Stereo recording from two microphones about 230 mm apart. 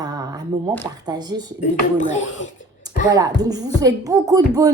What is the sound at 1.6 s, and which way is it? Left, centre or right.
Speech, left.